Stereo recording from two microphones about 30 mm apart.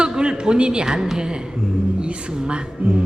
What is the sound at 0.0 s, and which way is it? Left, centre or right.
A woman's voice, right.